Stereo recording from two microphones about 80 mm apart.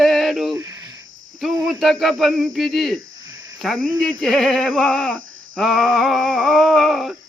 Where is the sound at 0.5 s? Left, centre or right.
Right.